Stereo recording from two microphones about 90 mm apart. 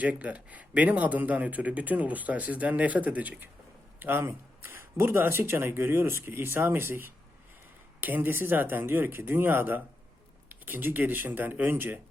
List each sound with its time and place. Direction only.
0.0 s speech: 15° right (ahead or behind)